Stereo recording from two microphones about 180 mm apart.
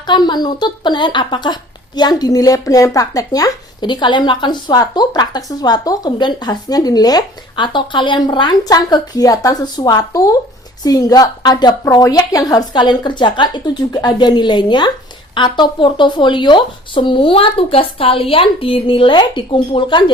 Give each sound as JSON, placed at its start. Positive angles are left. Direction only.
{"t": 0.1, "sound": "speech", "side_deg": 25}